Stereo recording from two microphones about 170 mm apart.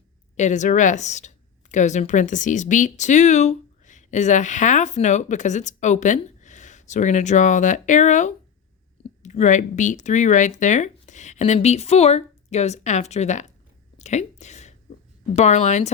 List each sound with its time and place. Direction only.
0.3 s speech: 45° left (ahead or behind)
14.0 s a sound: 40° left (ahead or behind)
15.4 s speech: 40° left (ahead or behind)